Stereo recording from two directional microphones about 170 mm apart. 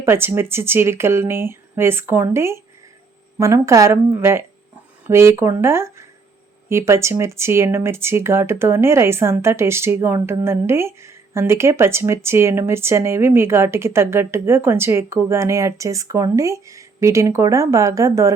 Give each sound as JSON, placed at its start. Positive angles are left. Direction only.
{"t": 0.0, "sound": "speech", "side_deg": -15}